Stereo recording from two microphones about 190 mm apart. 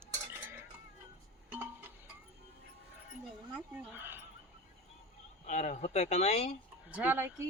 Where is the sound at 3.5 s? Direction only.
5° right (ahead or behind).